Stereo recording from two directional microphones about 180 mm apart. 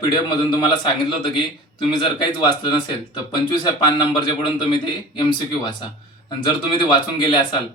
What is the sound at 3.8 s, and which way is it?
A man's voice, 25° left (ahead or behind).